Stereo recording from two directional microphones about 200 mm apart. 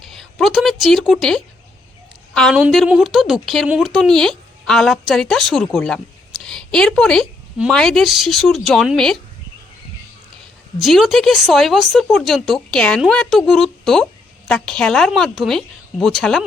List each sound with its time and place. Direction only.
0.1 s speech: centre (ahead or behind)
10.8 s speech: centre (ahead or behind)